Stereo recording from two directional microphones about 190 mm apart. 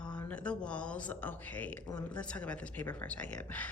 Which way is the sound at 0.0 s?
5° left (ahead or behind).